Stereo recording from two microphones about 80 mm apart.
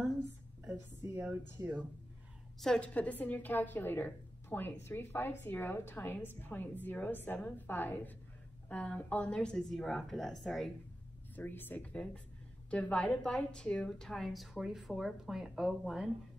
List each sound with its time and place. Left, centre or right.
1.6 s speech: right
2.6 s a woman's voice: centre
11.3 s a woman's voice: left; by 16.1 s centre